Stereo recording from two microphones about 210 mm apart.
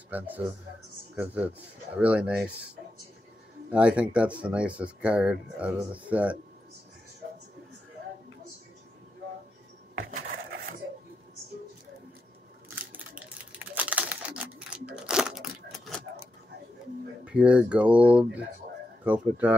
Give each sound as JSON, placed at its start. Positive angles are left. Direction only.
{"t": 0.1, "sound": "speech", "side_deg": -10}
{"t": 3.7, "sound": "speech", "side_deg": -5}
{"t": 9.9, "sound": "wood", "side_deg": -45}
{"t": 12.6, "sound": "typing", "side_deg": -5}
{"t": 17.2, "sound": "speech", "side_deg": -5}